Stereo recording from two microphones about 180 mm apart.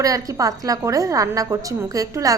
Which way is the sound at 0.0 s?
20° right (ahead or behind).